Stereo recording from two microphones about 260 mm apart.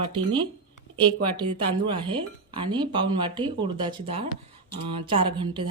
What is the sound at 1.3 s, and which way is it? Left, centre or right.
Speech, centre.